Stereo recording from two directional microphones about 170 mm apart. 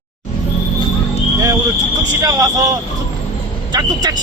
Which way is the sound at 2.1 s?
20° right (ahead or behind).